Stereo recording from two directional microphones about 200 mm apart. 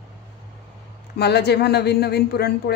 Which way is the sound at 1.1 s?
55° left (ahead or behind).